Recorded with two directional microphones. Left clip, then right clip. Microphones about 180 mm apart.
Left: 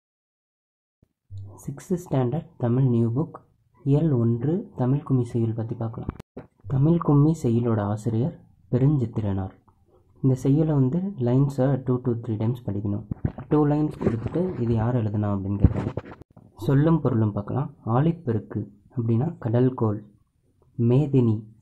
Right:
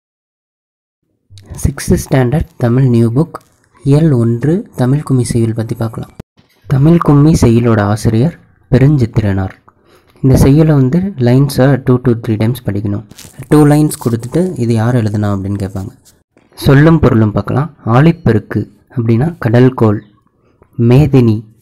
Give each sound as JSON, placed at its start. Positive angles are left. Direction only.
{"t": 1.5, "sound": "speech", "side_deg": -20}
{"t": 13.5, "sound": "speech", "side_deg": -35}
{"t": 20.8, "sound": "speech", "side_deg": -20}